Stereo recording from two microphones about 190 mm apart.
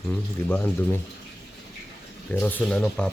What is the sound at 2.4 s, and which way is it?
Speech, 10° left (ahead or behind).